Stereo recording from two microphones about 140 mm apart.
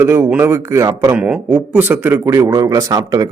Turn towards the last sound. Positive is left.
turn(degrees=-25)  # may be behind; listen again after turning